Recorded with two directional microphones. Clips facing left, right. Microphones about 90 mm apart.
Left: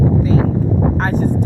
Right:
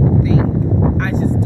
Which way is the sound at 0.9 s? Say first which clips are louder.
Left 1 dB; 45° left (ahead or behind).